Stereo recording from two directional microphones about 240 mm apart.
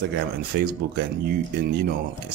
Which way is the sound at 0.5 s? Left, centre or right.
Right.